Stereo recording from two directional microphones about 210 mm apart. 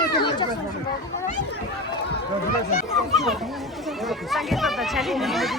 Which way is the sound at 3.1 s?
Centre (ahead or behind).